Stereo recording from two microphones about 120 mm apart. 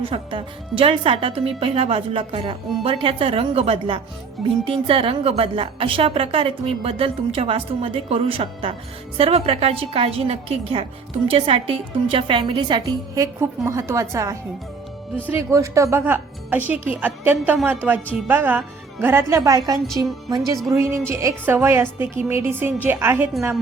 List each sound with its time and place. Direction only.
0.0 s a woman's voice: 50° right (ahead or behind)
13.1 s a woman's voice: 25° right (ahead or behind)